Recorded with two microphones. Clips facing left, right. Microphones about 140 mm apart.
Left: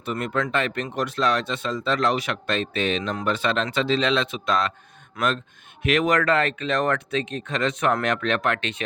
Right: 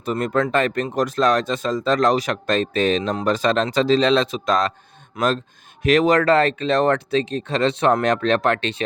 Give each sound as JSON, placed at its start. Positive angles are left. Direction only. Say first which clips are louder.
{"t": 0.0, "sound": "speech", "louder": "right 5 dB", "side_deg": -35}
{"t": 5.2, "sound": "speech", "louder": "right 4 dB", "side_deg": -20}
{"t": 5.8, "sound": "speech", "louder": "right 5 dB", "side_deg": -35}